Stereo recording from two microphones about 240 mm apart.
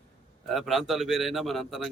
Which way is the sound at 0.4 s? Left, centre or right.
Centre.